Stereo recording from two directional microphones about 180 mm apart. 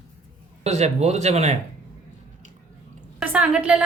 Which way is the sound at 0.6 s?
40° right (ahead or behind).